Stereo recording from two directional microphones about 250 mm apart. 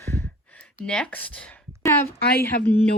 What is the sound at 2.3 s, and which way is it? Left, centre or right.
Speech, left.